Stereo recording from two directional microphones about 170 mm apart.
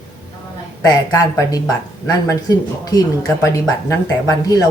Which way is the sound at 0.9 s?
20° left (ahead or behind).